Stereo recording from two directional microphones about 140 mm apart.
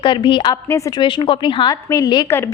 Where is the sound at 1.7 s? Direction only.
25° left (ahead or behind).